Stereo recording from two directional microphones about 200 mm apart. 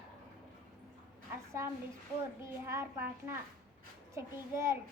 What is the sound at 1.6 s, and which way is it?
Speech, 15° right (ahead or behind).